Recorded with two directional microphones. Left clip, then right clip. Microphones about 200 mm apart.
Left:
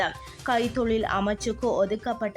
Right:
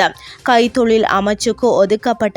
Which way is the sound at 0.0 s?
40° right (ahead or behind).